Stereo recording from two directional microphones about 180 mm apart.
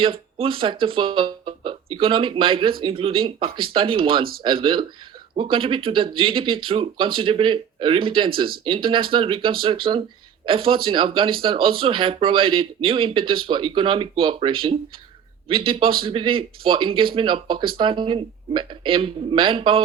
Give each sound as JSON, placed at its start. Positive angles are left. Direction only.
{"t": 0.0, "sound": "a man's voice", "side_deg": -30}